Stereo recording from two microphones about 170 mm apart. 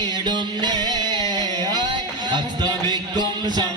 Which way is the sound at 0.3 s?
25° right (ahead or behind).